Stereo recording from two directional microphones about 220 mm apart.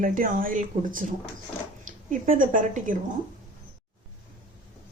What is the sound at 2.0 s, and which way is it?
Speech, 35° right (ahead or behind).